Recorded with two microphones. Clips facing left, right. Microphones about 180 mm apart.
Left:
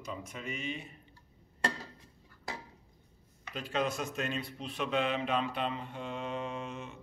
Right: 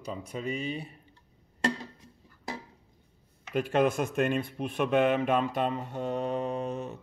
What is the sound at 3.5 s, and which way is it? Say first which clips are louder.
A man's voice: right 8 dB; 55° right (ahead or behind).